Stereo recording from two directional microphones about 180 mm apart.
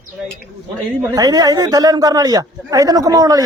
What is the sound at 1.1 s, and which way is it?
A man's voice, 20° right (ahead or behind).